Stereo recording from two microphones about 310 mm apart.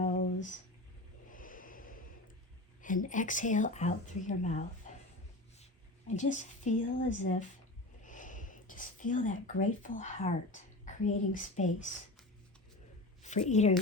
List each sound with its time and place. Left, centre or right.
0.0 s a sound: left
1.3 s snort: left
2.8 s speech: left
4.9 s a sound: left
6.1 s speech: left
13.5 s speech: left